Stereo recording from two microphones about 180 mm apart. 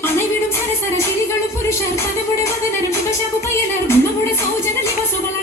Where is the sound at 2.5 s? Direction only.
15° left (ahead or behind).